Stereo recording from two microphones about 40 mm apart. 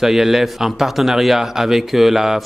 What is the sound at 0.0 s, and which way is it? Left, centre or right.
A man's voice, centre.